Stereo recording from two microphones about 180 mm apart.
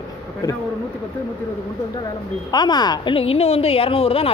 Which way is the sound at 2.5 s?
25° left (ahead or behind).